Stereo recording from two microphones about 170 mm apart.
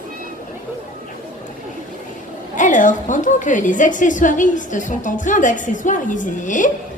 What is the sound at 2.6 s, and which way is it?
A woman's voice, 50° left (ahead or behind).